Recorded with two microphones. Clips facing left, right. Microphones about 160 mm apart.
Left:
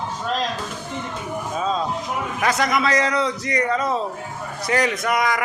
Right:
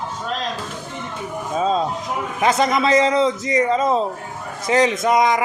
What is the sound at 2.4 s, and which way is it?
A man's voice, 25° right (ahead or behind).